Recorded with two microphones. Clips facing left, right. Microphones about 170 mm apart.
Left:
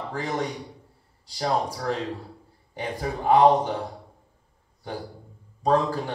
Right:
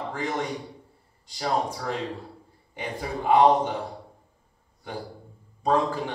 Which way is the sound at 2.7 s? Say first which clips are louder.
Left 2 dB; 35° left (ahead or behind).